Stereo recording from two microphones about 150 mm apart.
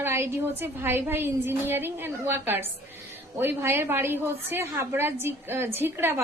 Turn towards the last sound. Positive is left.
turn(degrees=-15)  # may be behind; listen again after turning